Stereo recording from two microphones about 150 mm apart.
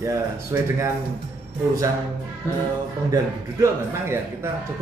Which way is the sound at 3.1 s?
20° right (ahead or behind).